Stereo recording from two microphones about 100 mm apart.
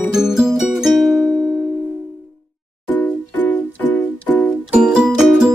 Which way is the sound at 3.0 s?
15° left (ahead or behind).